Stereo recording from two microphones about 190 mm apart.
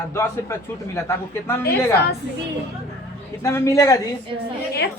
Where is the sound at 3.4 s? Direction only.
15° left (ahead or behind).